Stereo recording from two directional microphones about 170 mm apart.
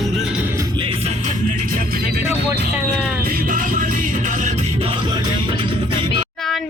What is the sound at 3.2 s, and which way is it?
Music, 60° right (ahead or behind).